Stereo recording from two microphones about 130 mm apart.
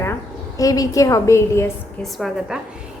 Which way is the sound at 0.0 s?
25° left (ahead or behind).